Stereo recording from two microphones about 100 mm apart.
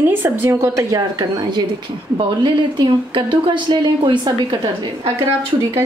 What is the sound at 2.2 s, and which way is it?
A woman's voice, 55° right (ahead or behind).